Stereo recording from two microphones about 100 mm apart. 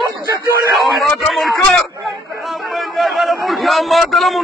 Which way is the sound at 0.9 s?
Centre (ahead or behind).